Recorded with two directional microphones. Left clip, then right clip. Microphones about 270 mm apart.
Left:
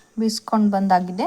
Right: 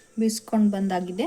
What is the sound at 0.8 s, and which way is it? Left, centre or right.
Speech, left.